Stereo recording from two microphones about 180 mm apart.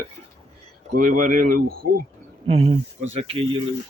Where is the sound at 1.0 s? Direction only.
45° right (ahead or behind).